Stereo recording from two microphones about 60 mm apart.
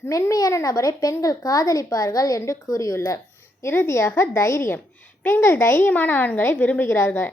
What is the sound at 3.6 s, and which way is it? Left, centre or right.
A woman's voice, left.